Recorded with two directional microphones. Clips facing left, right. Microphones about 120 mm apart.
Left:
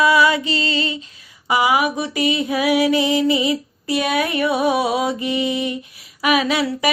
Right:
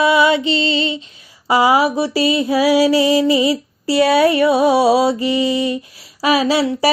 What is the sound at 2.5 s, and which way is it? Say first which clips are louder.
Child singing: right 5 dB; 30° right (ahead or behind).